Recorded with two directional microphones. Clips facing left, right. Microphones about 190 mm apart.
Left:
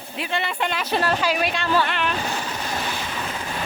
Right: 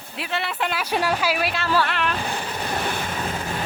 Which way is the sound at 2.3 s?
55° right (ahead or behind).